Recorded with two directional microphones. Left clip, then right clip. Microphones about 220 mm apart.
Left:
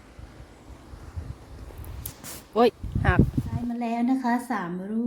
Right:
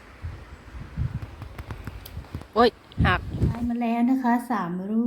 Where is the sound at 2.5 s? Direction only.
25° left (ahead or behind).